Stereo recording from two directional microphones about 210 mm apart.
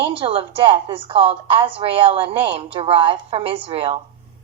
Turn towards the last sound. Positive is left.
turn(degrees=-25)  # may be behind; listen again after turning